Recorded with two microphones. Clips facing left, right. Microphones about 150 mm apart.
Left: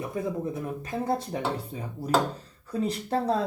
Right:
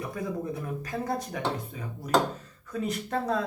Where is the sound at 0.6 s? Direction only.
25° left (ahead or behind).